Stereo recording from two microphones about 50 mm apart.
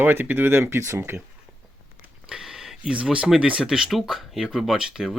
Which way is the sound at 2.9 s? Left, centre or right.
Right.